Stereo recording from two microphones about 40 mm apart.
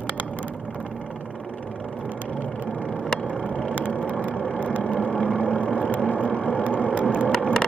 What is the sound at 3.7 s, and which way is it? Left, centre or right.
Vehicle, left.